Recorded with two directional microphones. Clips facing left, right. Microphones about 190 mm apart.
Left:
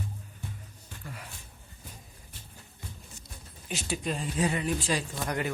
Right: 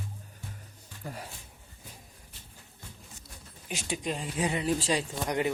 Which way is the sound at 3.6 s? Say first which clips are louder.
Left 1 dB; 15° right (ahead or behind).